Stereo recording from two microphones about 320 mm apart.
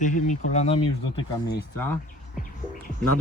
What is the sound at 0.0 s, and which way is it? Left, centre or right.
Speech, left.